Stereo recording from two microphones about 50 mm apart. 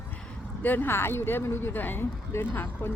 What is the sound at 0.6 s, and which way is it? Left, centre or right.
Speech, left.